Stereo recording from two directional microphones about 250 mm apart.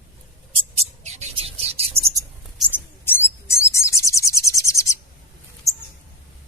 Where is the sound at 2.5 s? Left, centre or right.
Centre.